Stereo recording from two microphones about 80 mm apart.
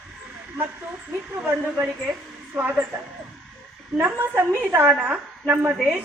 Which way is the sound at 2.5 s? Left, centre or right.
Right.